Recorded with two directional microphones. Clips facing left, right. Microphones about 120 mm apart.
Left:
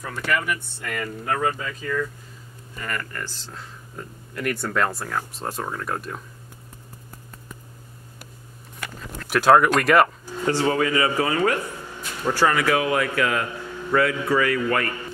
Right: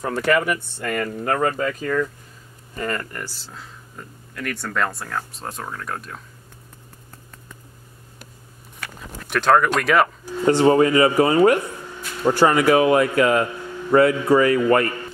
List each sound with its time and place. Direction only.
0.1 s speech: 60° right (ahead or behind)
0.5 s speech: 45° right (ahead or behind)
2.7 s speech: 35° right (ahead or behind)
3.1 s speech: 10° right (ahead or behind)
4.4 s speech: 5° left (ahead or behind)
9.3 s speech: 5° left (ahead or behind)
10.4 s speech: 25° right (ahead or behind)